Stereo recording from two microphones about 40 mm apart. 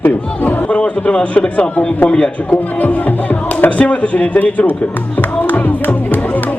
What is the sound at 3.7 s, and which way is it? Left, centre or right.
A man's voice, left.